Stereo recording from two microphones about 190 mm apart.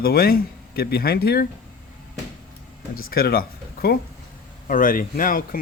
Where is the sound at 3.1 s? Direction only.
50° left (ahead or behind).